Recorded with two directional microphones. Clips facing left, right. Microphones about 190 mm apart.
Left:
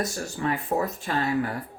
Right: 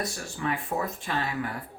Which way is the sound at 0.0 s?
40° left (ahead or behind).